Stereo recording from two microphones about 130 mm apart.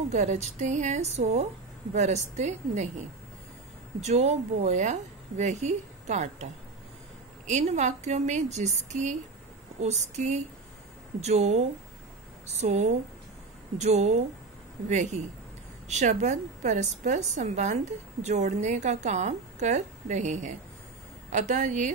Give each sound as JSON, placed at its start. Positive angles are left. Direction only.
{"t": 0.1, "sound": "a woman's voice", "side_deg": -60}
{"t": 4.0, "sound": "a woman's voice", "side_deg": -60}